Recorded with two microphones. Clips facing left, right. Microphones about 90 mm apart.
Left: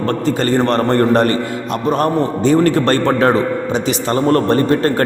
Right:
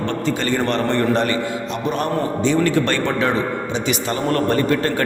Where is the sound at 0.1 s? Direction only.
40° left (ahead or behind).